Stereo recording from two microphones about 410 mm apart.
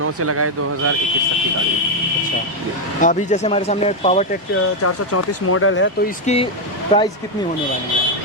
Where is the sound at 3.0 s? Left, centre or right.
Centre.